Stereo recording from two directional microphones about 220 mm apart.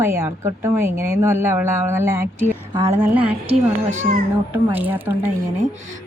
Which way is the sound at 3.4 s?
35° right (ahead or behind).